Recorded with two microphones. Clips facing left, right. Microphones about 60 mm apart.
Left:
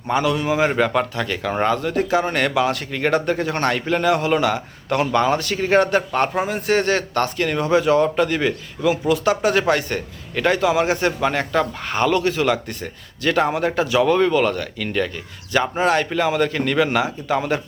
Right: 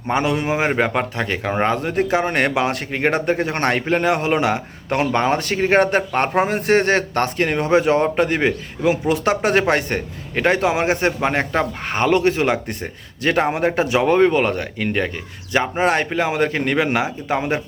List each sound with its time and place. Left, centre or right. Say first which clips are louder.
0.1 s a man's voice: even; right